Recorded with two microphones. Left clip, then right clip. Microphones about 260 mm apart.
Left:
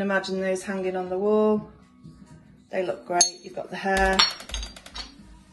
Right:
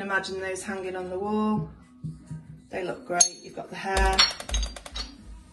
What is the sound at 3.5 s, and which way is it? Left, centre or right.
Cutlery, left.